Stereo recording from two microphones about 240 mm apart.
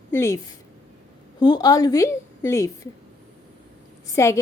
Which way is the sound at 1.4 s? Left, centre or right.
Centre.